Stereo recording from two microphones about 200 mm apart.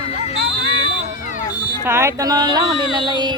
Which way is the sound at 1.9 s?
15° right (ahead or behind).